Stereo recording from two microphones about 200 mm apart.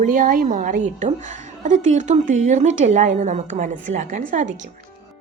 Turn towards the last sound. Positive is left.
turn(degrees=-40)  # may be behind; listen again after turning